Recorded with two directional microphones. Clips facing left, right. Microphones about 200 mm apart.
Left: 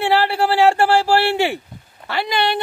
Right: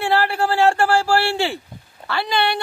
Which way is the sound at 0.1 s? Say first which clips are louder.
Left 1 dB; 15° left (ahead or behind).